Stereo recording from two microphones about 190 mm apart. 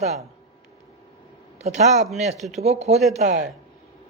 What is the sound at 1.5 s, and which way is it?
Speech, 35° right (ahead or behind).